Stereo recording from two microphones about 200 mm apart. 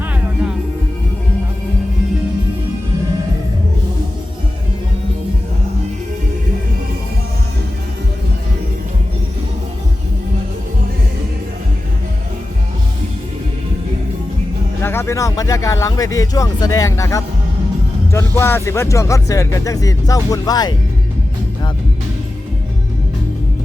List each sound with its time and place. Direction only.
0.0 s music: 10° right (ahead or behind)
14.8 s speech: 10° left (ahead or behind)